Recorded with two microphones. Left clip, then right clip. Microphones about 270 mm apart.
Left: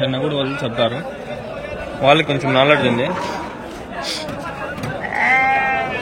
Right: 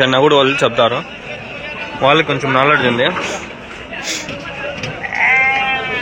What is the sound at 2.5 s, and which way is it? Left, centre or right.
Speech, centre.